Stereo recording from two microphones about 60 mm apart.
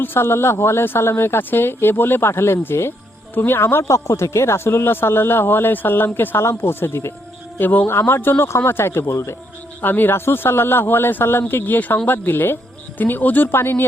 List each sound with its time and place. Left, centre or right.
0.0 s a woman's voice: left
3.8 s a woman's voice: left
9.8 s a woman's voice: left